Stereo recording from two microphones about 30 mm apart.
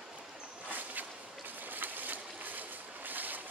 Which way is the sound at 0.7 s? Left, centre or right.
Right.